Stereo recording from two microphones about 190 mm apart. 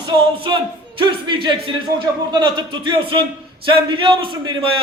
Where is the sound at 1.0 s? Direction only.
25° right (ahead or behind).